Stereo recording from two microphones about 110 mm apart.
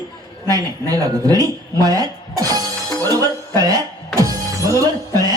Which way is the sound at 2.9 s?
35° right (ahead or behind).